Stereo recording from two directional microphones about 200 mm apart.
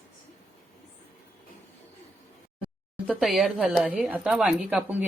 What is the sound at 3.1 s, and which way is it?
Speech, centre (ahead or behind).